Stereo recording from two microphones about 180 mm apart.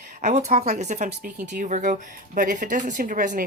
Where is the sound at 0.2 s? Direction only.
40° right (ahead or behind).